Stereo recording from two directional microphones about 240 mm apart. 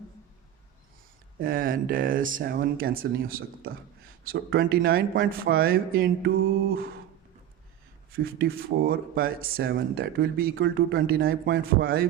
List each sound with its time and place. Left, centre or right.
1.4 s speech: right
8.1 s speech: right